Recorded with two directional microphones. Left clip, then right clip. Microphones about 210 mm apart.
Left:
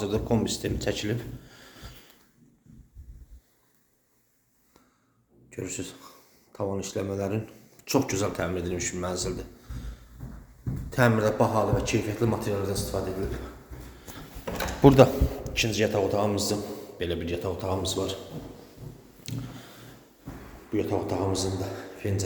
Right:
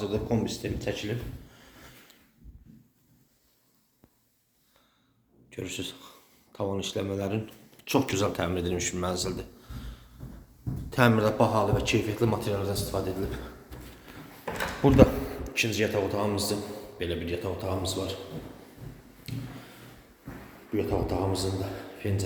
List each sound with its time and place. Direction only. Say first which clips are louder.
0.0 s a man's voice: left 2 dB; 15° left (ahead or behind)
1.5 s snort: left 4 dB; 10° left (ahead or behind)
5.5 s speech: even; centre (ahead or behind)
14.8 s a man's voice: left 4 dB; 20° left (ahead or behind)
19.3 s a sound: left 2 dB; 20° left (ahead or behind)
20.7 s speech: left 1 dB; centre (ahead or behind)